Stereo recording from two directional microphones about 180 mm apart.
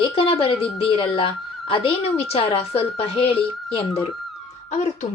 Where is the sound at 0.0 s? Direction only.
30° left (ahead or behind).